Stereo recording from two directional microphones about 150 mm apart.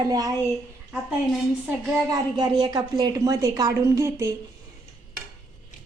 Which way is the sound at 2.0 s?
25° right (ahead or behind).